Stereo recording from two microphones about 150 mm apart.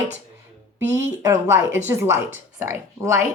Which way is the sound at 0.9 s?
15° right (ahead or behind).